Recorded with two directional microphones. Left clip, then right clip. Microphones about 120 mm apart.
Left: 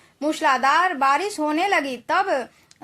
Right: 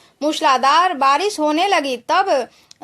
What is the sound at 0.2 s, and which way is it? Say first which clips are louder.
A woman's voice: right 4 dB; 40° right (ahead or behind).